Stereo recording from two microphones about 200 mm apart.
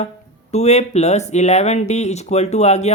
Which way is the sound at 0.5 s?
35° left (ahead or behind).